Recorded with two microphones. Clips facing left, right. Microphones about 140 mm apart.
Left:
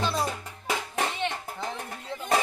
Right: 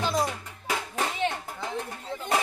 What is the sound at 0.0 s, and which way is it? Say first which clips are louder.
Music: right 1 dB; 15° right (ahead or behind).